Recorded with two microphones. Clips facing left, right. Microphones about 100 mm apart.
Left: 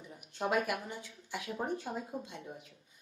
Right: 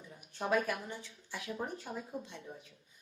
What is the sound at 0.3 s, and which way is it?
A woman's voice, 20° left (ahead or behind).